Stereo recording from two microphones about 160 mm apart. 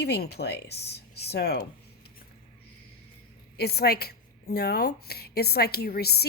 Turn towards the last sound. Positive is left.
turn(degrees=80)